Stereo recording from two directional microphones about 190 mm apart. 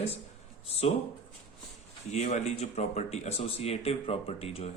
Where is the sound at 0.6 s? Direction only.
30° left (ahead or behind).